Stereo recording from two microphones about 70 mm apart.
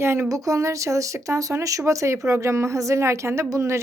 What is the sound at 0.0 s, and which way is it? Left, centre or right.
Speech, right.